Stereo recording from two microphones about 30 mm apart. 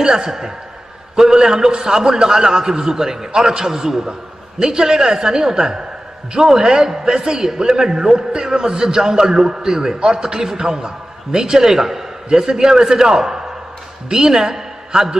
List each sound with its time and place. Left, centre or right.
0.0 s a man's voice: centre